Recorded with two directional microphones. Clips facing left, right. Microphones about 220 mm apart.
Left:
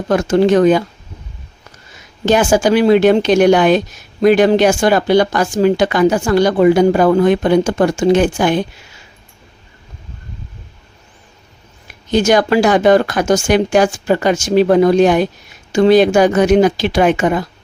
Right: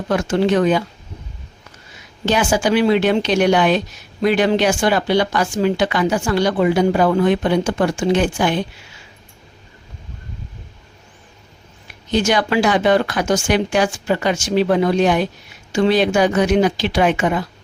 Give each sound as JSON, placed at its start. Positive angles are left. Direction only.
{"t": 0.1, "sound": "speech", "side_deg": 45}
{"t": 2.2, "sound": "speech", "side_deg": 45}
{"t": 12.1, "sound": "speech", "side_deg": 45}